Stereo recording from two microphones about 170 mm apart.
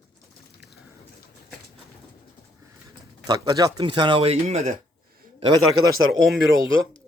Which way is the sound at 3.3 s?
20° right (ahead or behind).